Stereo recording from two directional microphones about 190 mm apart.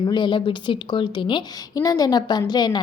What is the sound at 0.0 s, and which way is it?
A woman's voice, 25° left (ahead or behind).